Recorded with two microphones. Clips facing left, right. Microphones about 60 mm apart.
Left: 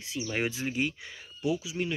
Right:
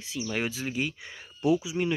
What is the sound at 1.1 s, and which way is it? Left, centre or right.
Speech, right.